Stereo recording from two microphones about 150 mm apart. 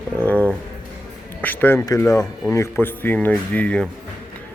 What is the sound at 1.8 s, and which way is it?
Speech, 20° left (ahead or behind).